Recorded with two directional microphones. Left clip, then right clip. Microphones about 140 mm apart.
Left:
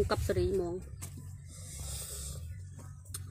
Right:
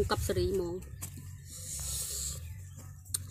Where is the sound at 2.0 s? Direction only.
10° right (ahead or behind).